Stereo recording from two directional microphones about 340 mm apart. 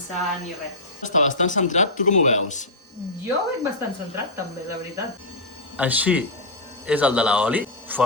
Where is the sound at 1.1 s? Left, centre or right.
Left.